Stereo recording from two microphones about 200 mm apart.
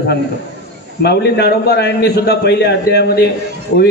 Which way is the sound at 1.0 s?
55° left (ahead or behind).